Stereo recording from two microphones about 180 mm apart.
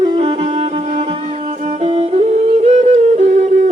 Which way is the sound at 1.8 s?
35° right (ahead or behind).